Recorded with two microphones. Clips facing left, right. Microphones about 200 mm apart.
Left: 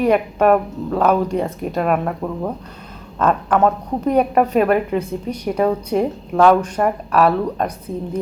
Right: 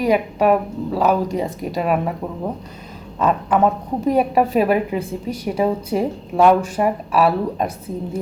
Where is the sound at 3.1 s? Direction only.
Centre (ahead or behind).